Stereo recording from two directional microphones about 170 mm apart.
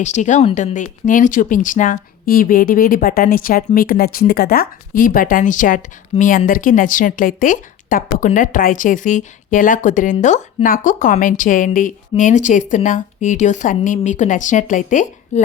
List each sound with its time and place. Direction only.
0.0 s speech: 45° left (ahead or behind)